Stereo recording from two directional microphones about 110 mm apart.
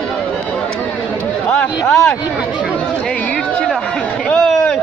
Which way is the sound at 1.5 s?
10° left (ahead or behind).